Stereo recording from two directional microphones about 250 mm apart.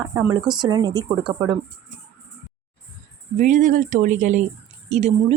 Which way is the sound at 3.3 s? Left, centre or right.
Right.